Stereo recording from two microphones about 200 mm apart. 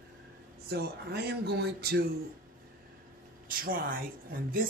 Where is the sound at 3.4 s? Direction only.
45° right (ahead or behind).